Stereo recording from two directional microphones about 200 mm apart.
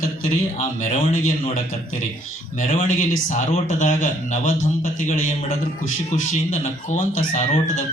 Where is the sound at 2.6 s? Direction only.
40° left (ahead or behind).